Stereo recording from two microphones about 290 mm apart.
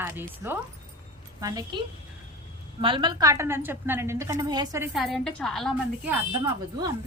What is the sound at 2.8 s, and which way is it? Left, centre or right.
A woman's voice, centre.